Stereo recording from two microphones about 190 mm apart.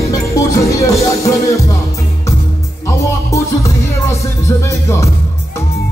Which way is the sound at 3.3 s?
15° left (ahead or behind).